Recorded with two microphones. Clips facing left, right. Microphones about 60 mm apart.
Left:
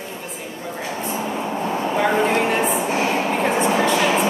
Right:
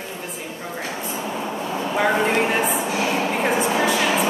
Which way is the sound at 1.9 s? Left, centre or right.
Centre.